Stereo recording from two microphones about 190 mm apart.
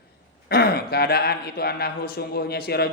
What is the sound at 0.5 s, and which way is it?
A man's voice, 55° left (ahead or behind).